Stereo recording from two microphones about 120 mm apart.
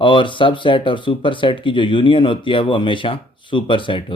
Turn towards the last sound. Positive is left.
turn(degrees=45)  # may be behind; listen again after turning